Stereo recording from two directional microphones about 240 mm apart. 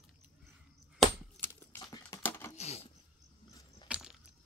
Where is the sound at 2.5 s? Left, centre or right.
Left.